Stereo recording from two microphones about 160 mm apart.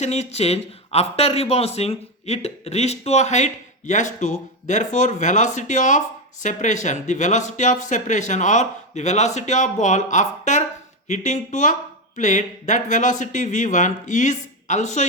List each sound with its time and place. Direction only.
0.0 s a man's voice: 45° left (ahead or behind)